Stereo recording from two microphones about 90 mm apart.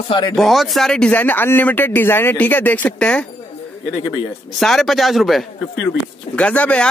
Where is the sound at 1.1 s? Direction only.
20° left (ahead or behind).